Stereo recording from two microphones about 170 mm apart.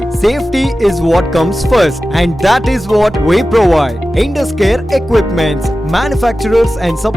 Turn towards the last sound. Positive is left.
turn(degrees=0)  # may be behind; listen again after turning